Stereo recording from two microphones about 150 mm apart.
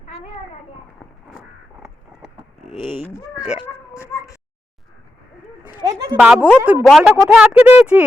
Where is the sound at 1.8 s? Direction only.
Centre (ahead or behind).